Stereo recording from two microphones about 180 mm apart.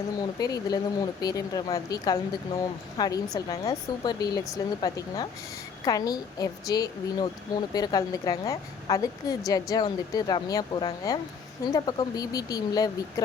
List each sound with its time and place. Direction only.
0.2 s speech: 20° left (ahead or behind)